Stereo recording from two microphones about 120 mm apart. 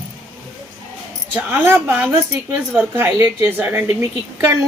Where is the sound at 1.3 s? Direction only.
15° right (ahead or behind).